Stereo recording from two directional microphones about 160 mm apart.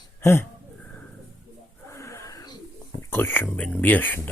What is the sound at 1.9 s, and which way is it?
Wheeze, 20° left (ahead or behind).